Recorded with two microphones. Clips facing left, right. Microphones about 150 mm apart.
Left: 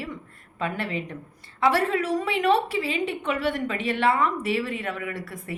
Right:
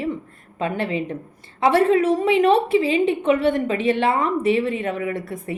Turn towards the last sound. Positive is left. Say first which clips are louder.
# right 7 dB
turn(degrees=-25)  # may be behind; listen again after turning